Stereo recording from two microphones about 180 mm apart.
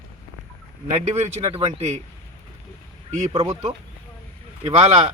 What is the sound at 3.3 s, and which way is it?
Speech, 20° right (ahead or behind).